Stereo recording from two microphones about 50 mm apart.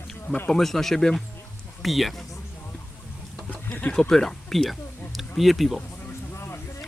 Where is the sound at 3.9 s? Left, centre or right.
Centre.